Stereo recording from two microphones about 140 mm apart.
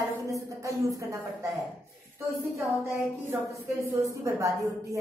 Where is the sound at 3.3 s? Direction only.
20° right (ahead or behind).